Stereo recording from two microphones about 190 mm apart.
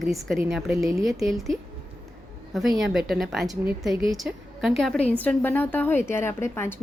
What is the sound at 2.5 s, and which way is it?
A woman's voice, centre (ahead or behind).